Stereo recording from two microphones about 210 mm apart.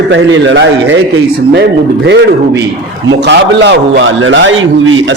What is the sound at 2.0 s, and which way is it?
A man's voice, 55° right (ahead or behind).